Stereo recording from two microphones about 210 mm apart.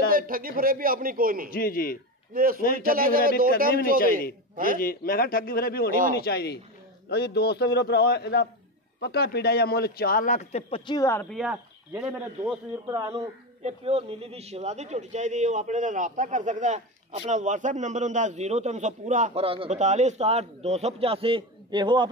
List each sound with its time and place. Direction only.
0.1 s a man's voice: 40° right (ahead or behind)
1.5 s a man's voice: 45° left (ahead or behind)
2.3 s a man's voice: 45° right (ahead or behind)
4.7 s a man's voice: 45° left (ahead or behind)
11.0 s speech: 10° left (ahead or behind)
11.3 s a man's voice: 5° right (ahead or behind)
13.6 s a man's voice: 30° right (ahead or behind)